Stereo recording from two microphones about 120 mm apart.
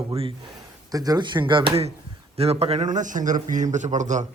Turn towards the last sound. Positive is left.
turn(degrees=-90)